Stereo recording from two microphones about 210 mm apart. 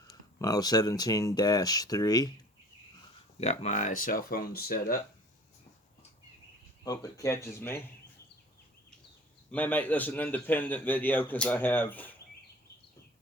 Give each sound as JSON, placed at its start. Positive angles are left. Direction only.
{"t": 0.3, "sound": "a man's voice", "side_deg": 15}
{"t": 3.3, "sound": "speech", "side_deg": 30}
{"t": 6.8, "sound": "a man's voice", "side_deg": 15}
{"t": 9.5, "sound": "a man's voice", "side_deg": 10}